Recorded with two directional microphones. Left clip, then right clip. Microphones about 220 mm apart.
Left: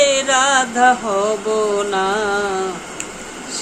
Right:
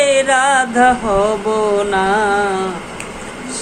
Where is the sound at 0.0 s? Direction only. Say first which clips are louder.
Right 2 dB; 20° left (ahead or behind).